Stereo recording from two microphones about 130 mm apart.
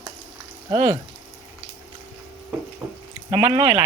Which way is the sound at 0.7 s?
45° right (ahead or behind).